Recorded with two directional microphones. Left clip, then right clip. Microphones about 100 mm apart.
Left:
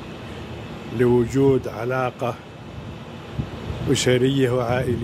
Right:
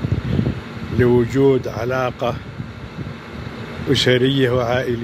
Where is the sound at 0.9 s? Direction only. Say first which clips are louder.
Right 3 dB; 15° left (ahead or behind).